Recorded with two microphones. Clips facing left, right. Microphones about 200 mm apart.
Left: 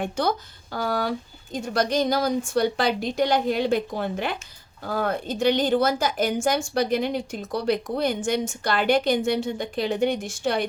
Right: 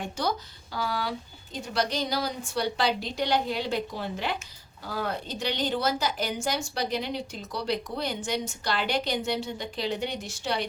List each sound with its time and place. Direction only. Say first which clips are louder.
0.0 s a woman's voice: left 5 dB; 55° left (ahead or behind)